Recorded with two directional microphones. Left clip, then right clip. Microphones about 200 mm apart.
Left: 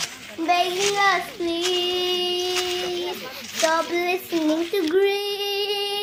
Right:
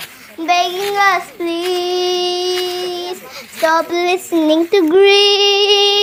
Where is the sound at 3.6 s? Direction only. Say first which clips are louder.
Right 8 dB; 35° right (ahead or behind).